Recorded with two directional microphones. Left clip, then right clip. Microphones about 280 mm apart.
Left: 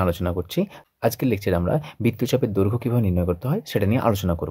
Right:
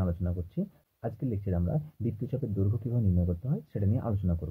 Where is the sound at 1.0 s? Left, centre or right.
Left.